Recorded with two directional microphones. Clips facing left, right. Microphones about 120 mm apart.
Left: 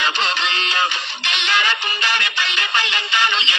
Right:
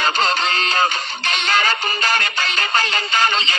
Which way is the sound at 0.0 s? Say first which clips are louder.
Right 3 dB; 40° right (ahead or behind).